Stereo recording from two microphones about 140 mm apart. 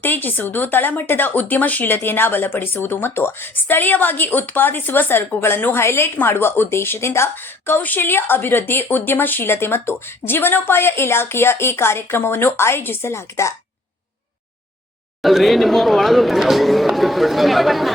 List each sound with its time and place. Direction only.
0.0 s speech: 15° left (ahead or behind)
15.2 s speech: centre (ahead or behind)